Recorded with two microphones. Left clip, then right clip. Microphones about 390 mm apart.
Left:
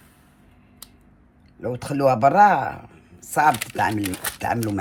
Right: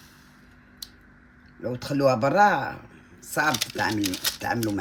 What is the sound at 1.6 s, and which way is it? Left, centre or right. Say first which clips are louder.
A man's voice: left 3 dB; centre.